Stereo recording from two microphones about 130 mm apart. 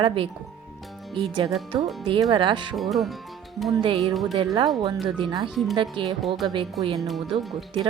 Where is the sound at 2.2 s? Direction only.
35° right (ahead or behind).